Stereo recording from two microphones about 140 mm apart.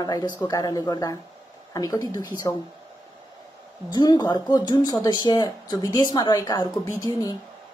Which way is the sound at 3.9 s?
30° left (ahead or behind).